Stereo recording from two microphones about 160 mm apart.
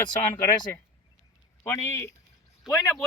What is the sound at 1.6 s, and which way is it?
Speech, 15° left (ahead or behind).